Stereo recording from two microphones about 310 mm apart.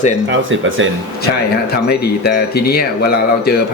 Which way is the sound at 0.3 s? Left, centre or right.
Right.